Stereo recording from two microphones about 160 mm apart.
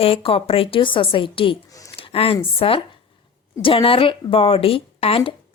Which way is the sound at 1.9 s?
35° left (ahead or behind).